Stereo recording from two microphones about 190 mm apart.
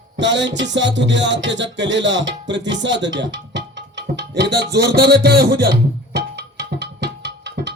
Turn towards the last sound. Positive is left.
turn(degrees=-65)  # may be behind; listen again after turning